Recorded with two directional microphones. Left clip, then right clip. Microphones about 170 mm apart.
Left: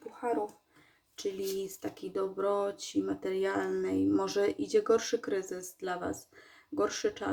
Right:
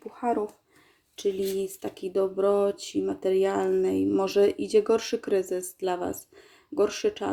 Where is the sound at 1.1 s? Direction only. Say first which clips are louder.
Right 7 dB; 40° right (ahead or behind).